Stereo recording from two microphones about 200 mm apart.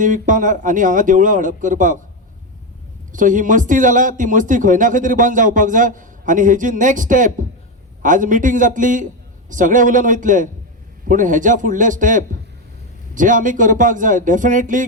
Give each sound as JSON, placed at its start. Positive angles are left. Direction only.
{"t": 0.0, "sound": "speech", "side_deg": -40}
{"t": 3.1, "sound": "speech", "side_deg": -40}